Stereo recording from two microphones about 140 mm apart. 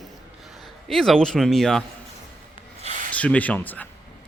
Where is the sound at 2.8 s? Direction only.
60° right (ahead or behind).